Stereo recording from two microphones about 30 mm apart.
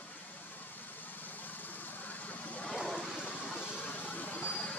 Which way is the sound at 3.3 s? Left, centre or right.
Left.